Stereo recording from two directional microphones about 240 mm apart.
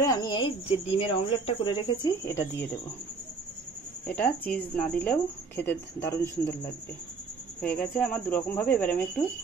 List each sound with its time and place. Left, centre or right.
0.0 s speech: centre
2.2 s speech: centre
4.1 s speech: centre
7.6 s speech: centre